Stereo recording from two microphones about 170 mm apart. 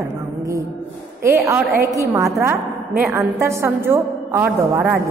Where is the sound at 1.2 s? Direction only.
15° right (ahead or behind).